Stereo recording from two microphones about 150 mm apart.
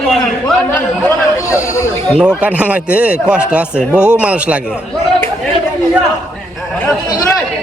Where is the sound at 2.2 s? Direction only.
5° right (ahead or behind).